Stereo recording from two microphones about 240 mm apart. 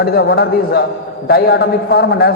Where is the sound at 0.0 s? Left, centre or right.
Left.